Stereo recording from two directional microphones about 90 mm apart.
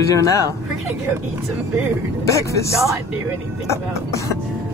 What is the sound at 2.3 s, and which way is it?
Speech, 35° left (ahead or behind).